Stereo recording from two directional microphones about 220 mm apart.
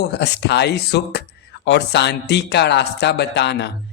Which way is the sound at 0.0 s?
50° left (ahead or behind).